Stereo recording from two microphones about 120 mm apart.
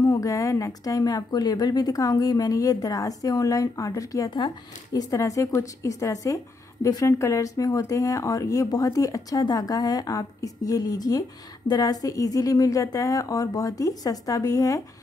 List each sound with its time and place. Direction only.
0.0 s a woman's voice: 25° left (ahead or behind)